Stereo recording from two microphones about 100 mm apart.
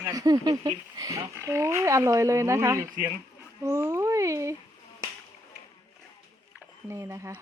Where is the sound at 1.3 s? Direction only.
25° right (ahead or behind).